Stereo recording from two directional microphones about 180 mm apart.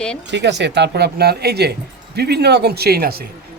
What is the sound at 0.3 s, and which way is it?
Speech, 75° right (ahead or behind).